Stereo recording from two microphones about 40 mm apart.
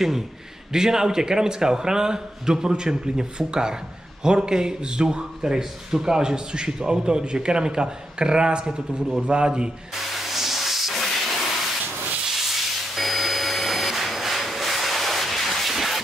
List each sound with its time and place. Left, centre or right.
0.7 s a man's voice: centre
10.1 s hiss: centre
12.3 s a sound: centre